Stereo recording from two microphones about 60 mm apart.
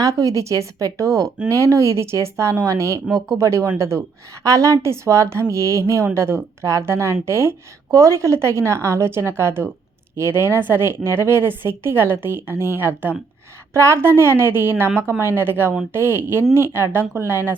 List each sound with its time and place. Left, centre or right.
0.0 s a woman's voice: right
4.4 s a woman's voice: right
7.9 s a woman's voice: right
13.7 s a woman's voice: right